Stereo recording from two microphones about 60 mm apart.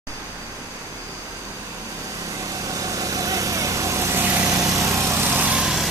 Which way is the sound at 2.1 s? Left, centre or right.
Right.